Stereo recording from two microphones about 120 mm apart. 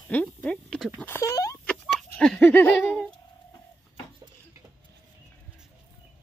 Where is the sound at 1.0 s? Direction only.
20° left (ahead or behind).